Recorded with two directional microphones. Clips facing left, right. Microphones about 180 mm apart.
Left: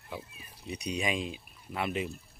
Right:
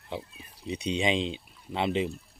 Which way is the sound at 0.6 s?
25° right (ahead or behind).